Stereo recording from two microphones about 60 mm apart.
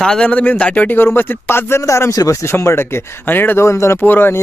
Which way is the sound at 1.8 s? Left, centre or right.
Left.